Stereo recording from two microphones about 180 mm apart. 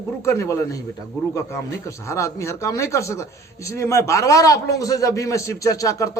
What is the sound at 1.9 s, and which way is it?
A man's voice, 15° left (ahead or behind).